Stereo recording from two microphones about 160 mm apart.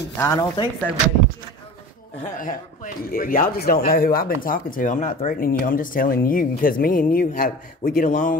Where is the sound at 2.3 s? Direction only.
55° left (ahead or behind).